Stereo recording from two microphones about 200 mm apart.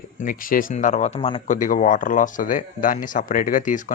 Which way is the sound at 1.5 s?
40° left (ahead or behind).